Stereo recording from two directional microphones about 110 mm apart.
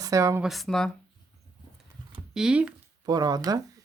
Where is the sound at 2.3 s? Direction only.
5° right (ahead or behind).